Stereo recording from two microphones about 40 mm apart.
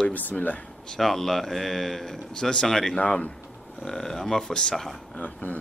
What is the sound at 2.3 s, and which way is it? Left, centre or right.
Speech, centre.